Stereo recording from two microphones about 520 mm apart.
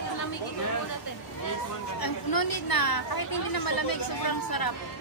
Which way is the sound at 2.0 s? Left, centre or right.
Left.